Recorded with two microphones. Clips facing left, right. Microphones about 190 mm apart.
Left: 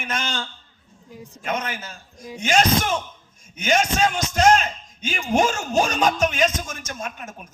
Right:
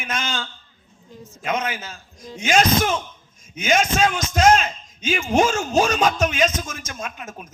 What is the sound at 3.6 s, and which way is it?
Speech, 45° left (ahead or behind).